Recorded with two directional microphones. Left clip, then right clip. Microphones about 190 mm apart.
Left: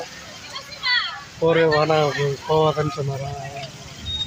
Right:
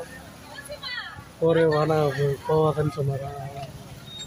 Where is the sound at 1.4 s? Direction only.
Centre (ahead or behind).